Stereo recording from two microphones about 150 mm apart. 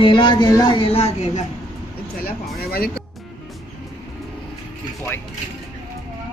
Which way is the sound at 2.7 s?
90° left.